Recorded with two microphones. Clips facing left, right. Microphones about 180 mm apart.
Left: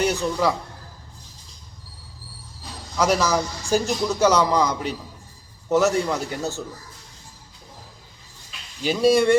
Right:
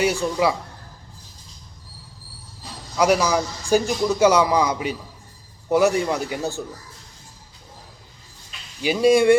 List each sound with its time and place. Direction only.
0.0 s a man's voice: 10° right (ahead or behind)
3.0 s a man's voice: 10° right (ahead or behind)
8.8 s a man's voice: 10° right (ahead or behind)